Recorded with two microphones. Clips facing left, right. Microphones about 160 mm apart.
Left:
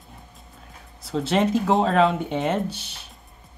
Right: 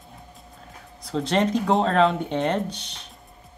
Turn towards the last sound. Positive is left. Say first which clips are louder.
# left 1 dB
turn(degrees=5)  # may be behind; listen again after turning